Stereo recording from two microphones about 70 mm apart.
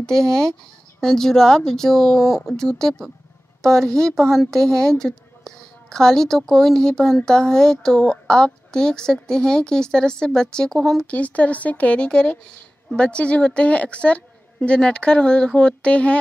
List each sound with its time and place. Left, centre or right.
0.0 s a woman's voice: centre
11.1 s a woman's voice: centre